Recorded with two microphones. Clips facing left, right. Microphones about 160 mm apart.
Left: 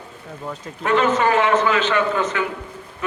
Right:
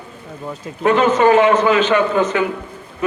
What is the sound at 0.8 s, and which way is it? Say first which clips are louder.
A man's voice: right 5 dB; 20° right (ahead or behind).